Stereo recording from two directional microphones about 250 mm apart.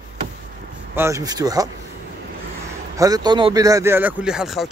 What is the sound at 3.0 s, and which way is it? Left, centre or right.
Speech, centre.